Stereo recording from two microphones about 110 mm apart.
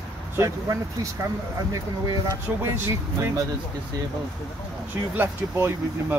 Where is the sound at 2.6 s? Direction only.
25° right (ahead or behind).